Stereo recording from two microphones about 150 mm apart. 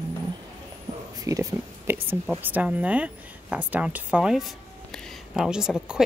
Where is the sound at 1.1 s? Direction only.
20° right (ahead or behind).